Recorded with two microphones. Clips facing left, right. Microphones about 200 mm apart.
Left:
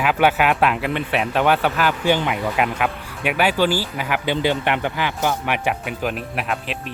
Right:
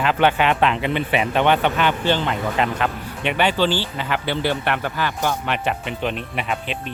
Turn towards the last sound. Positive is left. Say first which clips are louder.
# even
turn(degrees=0)  # may be behind; listen again after turning